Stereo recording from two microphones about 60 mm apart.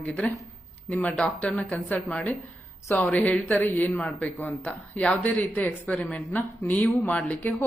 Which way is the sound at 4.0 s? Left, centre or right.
Centre.